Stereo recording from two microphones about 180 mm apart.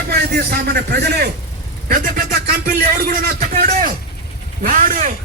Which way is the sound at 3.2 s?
55° right (ahead or behind).